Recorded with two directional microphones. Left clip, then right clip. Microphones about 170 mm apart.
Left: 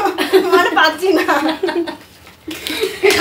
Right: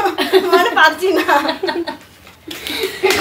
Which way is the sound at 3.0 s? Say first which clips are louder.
Left 2 dB; 15° left (ahead or behind).